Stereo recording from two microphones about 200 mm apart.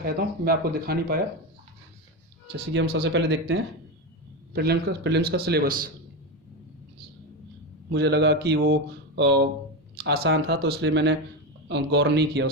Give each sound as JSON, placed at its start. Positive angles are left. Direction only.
{"t": 0.0, "sound": "a man's voice", "side_deg": -50}
{"t": 2.9, "sound": "speech", "side_deg": -60}
{"t": 4.5, "sound": "a man's voice", "side_deg": -55}
{"t": 7.9, "sound": "speech", "side_deg": -60}